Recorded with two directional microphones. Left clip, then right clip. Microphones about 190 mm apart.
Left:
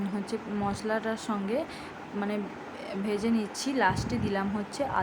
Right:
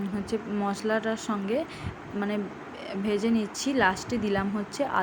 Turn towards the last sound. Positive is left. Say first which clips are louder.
# right 2 dB
turn(degrees=-10)  # may be behind; listen again after turning